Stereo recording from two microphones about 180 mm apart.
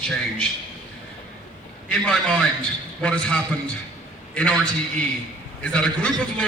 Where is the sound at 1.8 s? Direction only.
5° left (ahead or behind).